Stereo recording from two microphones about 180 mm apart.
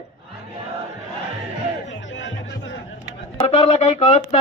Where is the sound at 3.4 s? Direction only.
35° left (ahead or behind).